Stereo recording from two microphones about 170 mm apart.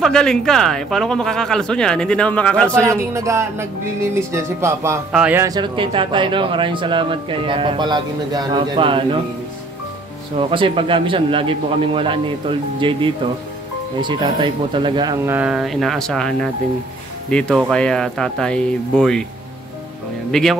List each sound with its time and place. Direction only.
0.0 s speech: 5° left (ahead or behind)
3.2 s speech: 20° right (ahead or behind)
5.4 s speech: 25° right (ahead or behind)
10.5 s speech: 30° right (ahead or behind)
15.2 s speech: 10° right (ahead or behind)
20.2 s speech: 5° left (ahead or behind)